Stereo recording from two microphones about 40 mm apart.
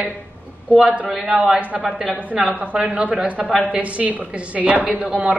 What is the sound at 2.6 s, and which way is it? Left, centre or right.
A man's voice, right.